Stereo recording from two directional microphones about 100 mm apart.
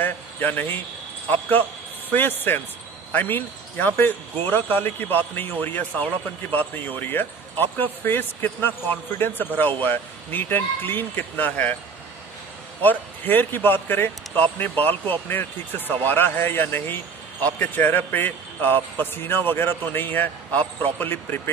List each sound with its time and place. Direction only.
0.0 s speech: 20° left (ahead or behind)
2.1 s speech: 20° left (ahead or behind)
12.8 s speech: 20° left (ahead or behind)